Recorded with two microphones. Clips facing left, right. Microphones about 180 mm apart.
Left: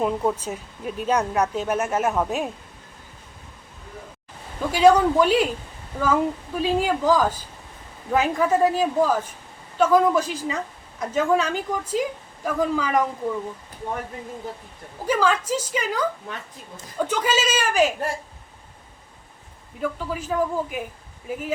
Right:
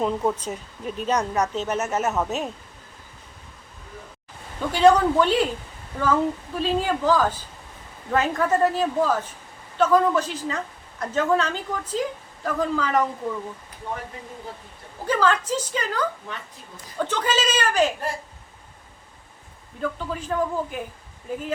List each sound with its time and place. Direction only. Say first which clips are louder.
0.0 s speech: left 1 dB; 5° left (ahead or behind)
4.6 s speech: left 1 dB; 10° left (ahead or behind)
15.0 s speech: even; 10° left (ahead or behind)
19.8 s speech: left 1 dB; 10° left (ahead or behind)